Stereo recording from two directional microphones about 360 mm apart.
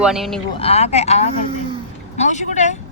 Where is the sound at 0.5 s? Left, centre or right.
Centre.